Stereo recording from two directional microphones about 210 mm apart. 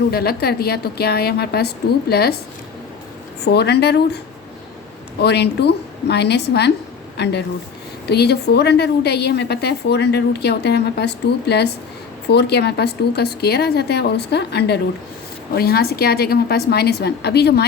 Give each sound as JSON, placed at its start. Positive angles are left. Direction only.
{"t": 0.1, "sound": "a woman's voice", "side_deg": 50}
{"t": 3.4, "sound": "a woman's voice", "side_deg": 50}
{"t": 5.2, "sound": "a woman's voice", "side_deg": 50}